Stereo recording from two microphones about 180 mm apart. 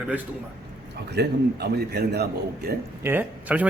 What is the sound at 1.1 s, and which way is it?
A man's voice, 65° right (ahead or behind).